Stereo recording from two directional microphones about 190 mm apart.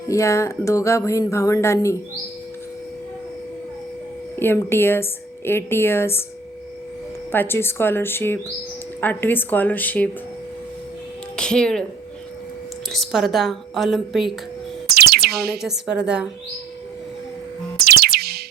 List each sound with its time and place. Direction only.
0.1 s speech: 15° left (ahead or behind)
4.4 s speech: 10° left (ahead or behind)
7.3 s speech: 10° left (ahead or behind)
11.3 s speech: 5° left (ahead or behind)
12.9 s a woman's voice: centre (ahead or behind)
14.8 s music: 55° right (ahead or behind)
15.5 s a woman's voice: centre (ahead or behind)
17.7 s music: 55° right (ahead or behind)